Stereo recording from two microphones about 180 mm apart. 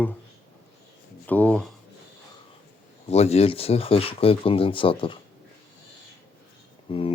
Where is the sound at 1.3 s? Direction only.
10° left (ahead or behind).